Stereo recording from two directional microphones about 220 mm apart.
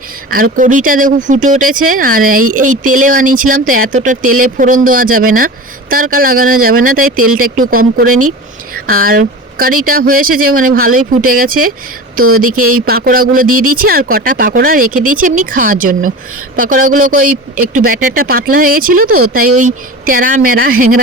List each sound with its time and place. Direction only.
0.6 s speech: 35° right (ahead or behind)